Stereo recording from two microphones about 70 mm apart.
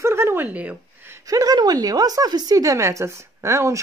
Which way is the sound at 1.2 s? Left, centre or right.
Right.